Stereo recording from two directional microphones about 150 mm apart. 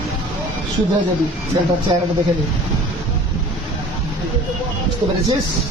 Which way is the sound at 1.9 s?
35° right (ahead or behind).